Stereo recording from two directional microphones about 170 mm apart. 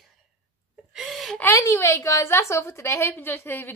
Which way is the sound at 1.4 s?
20° left (ahead or behind).